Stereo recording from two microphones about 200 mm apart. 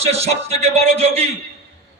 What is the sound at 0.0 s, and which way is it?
A man's voice, 30° right (ahead or behind).